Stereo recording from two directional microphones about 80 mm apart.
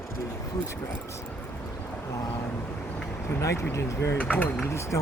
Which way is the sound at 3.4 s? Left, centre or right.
Left.